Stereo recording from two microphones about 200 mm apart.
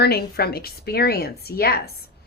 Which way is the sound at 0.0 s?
50° left (ahead or behind).